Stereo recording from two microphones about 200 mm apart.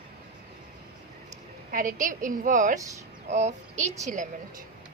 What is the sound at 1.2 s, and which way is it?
A woman's voice, 40° right (ahead or behind).